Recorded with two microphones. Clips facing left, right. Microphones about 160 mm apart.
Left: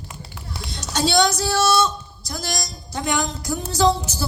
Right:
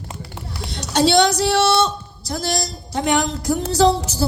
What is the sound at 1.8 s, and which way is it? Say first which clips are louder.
A woman's voice: right 2 dB; 35° right (ahead or behind).